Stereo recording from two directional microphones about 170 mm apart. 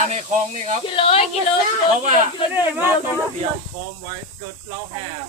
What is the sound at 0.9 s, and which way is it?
Speech, 30° left (ahead or behind).